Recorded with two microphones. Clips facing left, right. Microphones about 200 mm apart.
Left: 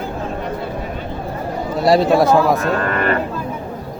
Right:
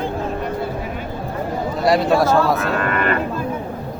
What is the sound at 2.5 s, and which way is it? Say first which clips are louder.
Speech: left 2 dB; 40° left (ahead or behind).